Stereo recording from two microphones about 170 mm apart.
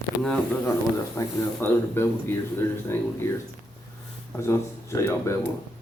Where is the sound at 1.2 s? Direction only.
20° left (ahead or behind).